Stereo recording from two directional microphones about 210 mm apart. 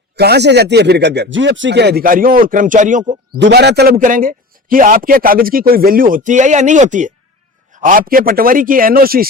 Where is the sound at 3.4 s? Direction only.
55° right (ahead or behind).